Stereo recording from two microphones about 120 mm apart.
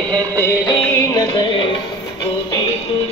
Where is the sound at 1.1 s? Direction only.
45° left (ahead or behind).